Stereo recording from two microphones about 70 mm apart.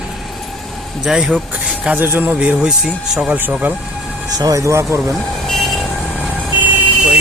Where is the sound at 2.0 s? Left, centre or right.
Right.